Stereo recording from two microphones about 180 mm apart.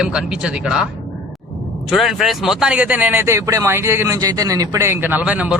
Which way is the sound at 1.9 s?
Centre (ahead or behind).